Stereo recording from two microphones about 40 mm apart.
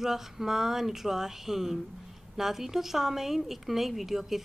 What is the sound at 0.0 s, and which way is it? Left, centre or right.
Speech, centre.